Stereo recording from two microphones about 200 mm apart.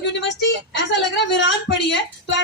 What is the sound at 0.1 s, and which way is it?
A woman's voice, 65° left (ahead or behind).